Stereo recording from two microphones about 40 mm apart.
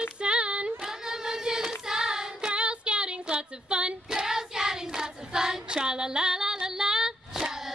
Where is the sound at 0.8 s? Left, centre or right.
Centre.